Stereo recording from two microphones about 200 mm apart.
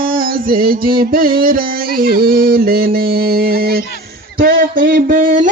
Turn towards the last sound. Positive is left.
turn(degrees=-40)  # may be behind; listen again after turning